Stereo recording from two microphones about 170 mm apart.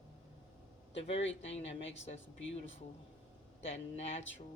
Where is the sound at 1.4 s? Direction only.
35° left (ahead or behind).